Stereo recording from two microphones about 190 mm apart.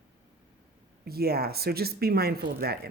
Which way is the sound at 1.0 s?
55° right (ahead or behind).